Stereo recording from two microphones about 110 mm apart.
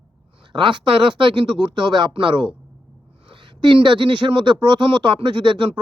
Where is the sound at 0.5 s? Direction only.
45° right (ahead or behind).